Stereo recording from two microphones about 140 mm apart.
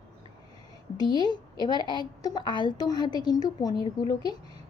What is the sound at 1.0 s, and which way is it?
A woman's voice, 30° left (ahead or behind).